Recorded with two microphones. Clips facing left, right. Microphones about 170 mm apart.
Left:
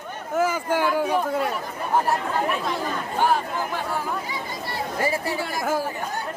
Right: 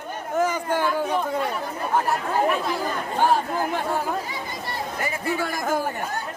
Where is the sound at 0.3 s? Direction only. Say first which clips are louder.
Left 1 dB; 5° left (ahead or behind).